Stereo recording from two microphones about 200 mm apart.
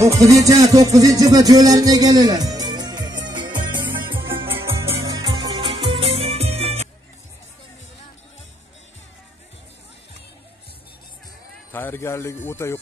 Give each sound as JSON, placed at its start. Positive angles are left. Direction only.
{"t": 0.2, "sound": "music", "side_deg": -15}
{"t": 11.7, "sound": "speech", "side_deg": 10}